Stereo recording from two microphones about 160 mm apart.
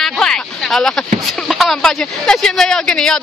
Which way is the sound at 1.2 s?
Centre (ahead or behind).